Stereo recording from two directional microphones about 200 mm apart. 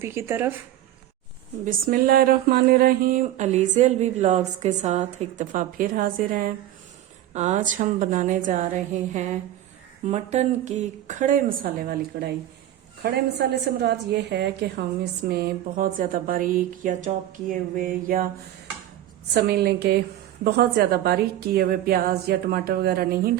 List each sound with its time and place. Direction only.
0.0 s speech: 10° right (ahead or behind)
1.6 s a woman's voice: 45° right (ahead or behind)
19.3 s a woman's voice: 55° right (ahead or behind)